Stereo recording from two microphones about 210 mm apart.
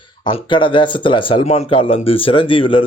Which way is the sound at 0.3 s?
25° left (ahead or behind).